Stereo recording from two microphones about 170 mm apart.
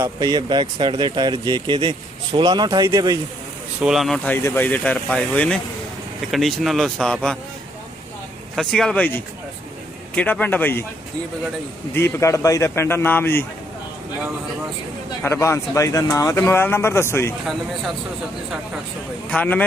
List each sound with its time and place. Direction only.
0.0 s speech: 25° right (ahead or behind)
3.8 s speech: 5° right (ahead or behind)
4.4 s a man's voice: 10° left (ahead or behind)
8.5 s a man's voice: centre (ahead or behind)
11.9 s a man's voice: 15° left (ahead or behind)
15.2 s a man's voice: 15° left (ahead or behind)
17.4 s speech: centre (ahead or behind)
19.3 s a man's voice: 10° left (ahead or behind)